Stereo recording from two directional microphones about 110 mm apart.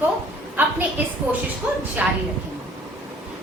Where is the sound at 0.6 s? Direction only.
15° right (ahead or behind).